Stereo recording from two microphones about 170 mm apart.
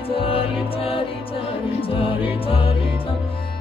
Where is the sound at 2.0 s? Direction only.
30° left (ahead or behind).